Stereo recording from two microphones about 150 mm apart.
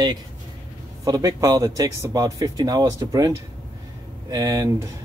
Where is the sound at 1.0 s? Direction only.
25° right (ahead or behind).